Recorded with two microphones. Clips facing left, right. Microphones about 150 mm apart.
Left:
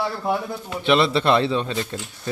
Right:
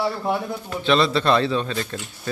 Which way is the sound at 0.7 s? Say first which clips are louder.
Left 1 dB; 20° left (ahead or behind).